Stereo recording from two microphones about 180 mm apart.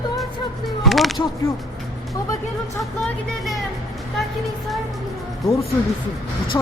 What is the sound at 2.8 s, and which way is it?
Speech, centre (ahead or behind).